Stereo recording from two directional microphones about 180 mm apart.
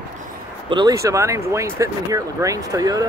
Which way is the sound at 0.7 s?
20° right (ahead or behind).